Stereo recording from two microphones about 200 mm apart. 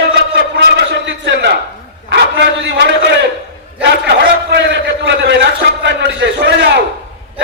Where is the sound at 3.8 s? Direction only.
60° right (ahead or behind).